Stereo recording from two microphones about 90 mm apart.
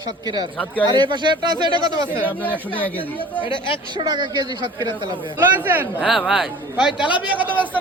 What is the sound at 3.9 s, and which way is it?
Speech, 55° right (ahead or behind).